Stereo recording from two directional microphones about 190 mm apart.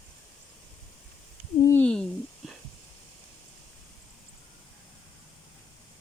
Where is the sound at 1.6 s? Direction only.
10° left (ahead or behind).